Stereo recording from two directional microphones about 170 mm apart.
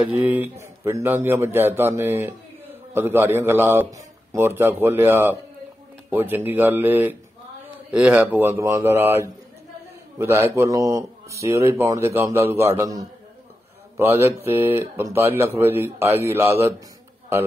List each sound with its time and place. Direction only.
0.1 s speech: 10° right (ahead or behind)